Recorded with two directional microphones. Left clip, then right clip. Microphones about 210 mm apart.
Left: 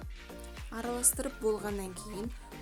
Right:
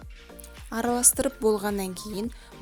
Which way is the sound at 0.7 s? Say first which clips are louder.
Right 9 dB; 40° right (ahead or behind).